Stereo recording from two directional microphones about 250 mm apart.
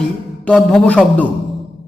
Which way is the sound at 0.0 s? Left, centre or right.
Centre.